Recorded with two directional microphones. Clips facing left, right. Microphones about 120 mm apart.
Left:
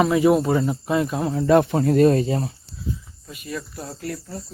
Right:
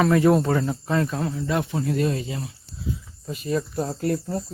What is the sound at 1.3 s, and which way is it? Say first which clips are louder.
Speech: left 9 dB; 50° left (ahead or behind).